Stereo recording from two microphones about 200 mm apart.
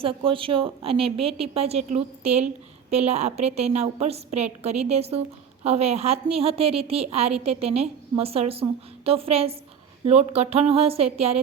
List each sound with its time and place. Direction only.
0.0 s a woman's voice: 25° right (ahead or behind)